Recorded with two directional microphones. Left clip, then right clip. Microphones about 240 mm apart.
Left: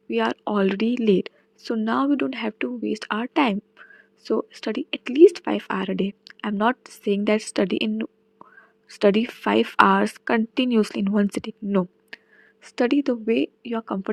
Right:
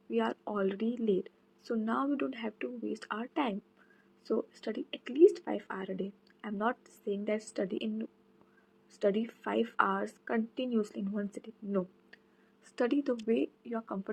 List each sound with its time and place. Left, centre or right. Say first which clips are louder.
0.1 s speech: left 10 dB; left